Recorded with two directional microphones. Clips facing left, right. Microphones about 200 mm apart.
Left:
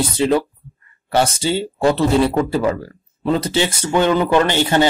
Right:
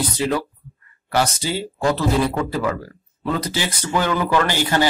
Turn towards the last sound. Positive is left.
turn(degrees=25)  # may be behind; listen again after turning